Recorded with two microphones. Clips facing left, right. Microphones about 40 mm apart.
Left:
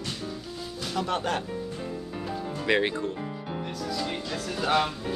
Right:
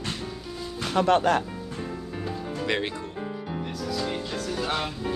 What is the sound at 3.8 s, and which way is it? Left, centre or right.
Music, centre.